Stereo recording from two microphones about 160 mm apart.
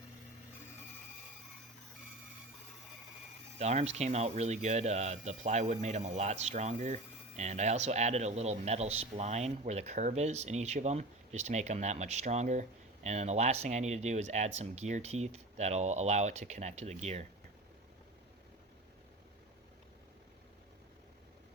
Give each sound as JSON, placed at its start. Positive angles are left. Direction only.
{"t": 3.6, "sound": "speech", "side_deg": -45}